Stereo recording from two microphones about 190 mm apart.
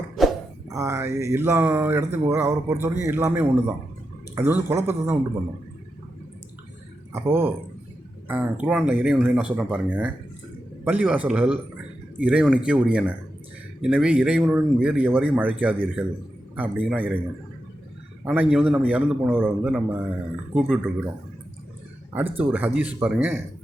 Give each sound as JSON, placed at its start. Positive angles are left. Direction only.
{"t": 0.2, "sound": "a sound", "side_deg": 0}
{"t": 0.7, "sound": "mantra", "side_deg": -15}
{"t": 7.1, "sound": "mantra", "side_deg": -10}
{"t": 12.2, "sound": "speech", "side_deg": -5}
{"t": 13.8, "sound": "mantra", "side_deg": -5}
{"t": 18.3, "sound": "mantra", "side_deg": -5}
{"t": 20.6, "sound": "speech", "side_deg": -5}
{"t": 22.1, "sound": "mantra", "side_deg": -10}